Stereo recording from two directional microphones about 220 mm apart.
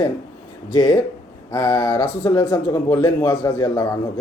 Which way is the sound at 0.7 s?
15° left (ahead or behind).